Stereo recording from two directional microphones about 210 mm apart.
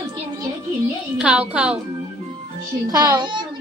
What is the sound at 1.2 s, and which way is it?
Speech, 5° right (ahead or behind).